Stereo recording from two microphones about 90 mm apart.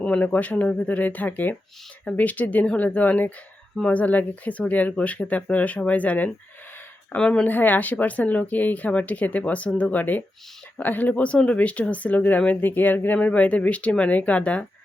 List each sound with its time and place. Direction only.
0.0 s speech: 15° left (ahead or behind)